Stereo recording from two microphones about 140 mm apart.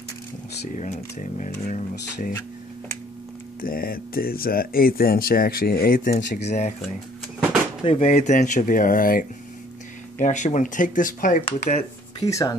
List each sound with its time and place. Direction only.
0.7 s speech: 55° left (ahead or behind)
3.6 s speech: 90° left
6.4 s speech: 55° left (ahead or behind)
7.8 s speech: 50° left (ahead or behind); by 9.2 s 85° left
10.2 s speech: 60° left (ahead or behind)
11.4 s speech: 50° left (ahead or behind)
12.2 s speech: 25° left (ahead or behind)